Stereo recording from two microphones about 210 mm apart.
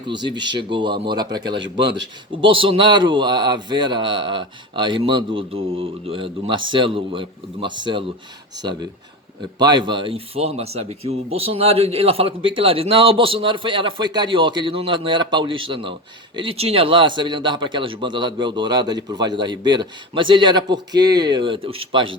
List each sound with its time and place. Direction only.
0.1 s a man's voice: 20° right (ahead or behind)